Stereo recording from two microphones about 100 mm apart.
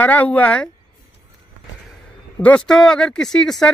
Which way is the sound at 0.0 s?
15° left (ahead or behind).